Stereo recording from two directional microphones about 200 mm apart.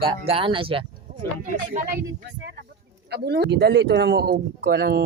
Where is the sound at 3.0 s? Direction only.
55° right (ahead or behind).